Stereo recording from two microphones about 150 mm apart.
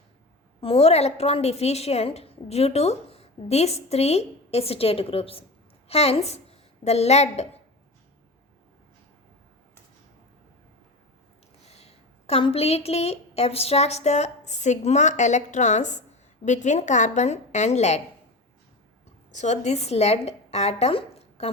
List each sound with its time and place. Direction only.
0.6 s a woman's voice: 40° left (ahead or behind)
11.6 s a woman's voice: 45° left (ahead or behind)
19.3 s a woman's voice: 50° left (ahead or behind)